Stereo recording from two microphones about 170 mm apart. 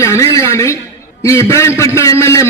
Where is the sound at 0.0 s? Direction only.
15° left (ahead or behind).